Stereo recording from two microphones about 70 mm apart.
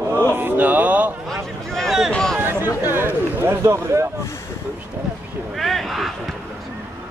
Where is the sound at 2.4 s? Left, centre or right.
Right.